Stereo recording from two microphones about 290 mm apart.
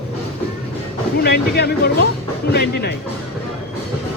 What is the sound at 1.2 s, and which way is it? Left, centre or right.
Speech, left.